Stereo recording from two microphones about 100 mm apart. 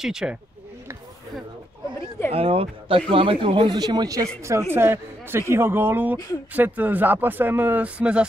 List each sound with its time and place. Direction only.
0.0 s speech: 5° right (ahead or behind)
2.0 s speech: 25° left (ahead or behind)
2.3 s speech: 75° right (ahead or behind)
3.1 s speech: 60° right (ahead or behind); by 4.3 s 40° right (ahead or behind)
4.4 s speech: 30° right (ahead or behind); by 8.3 s 10° right (ahead or behind)